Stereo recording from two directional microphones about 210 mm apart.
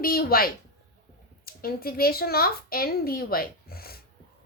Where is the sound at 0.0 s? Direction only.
45° left (ahead or behind).